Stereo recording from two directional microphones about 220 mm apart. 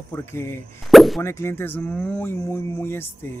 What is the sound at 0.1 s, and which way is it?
Speech, 10° left (ahead or behind).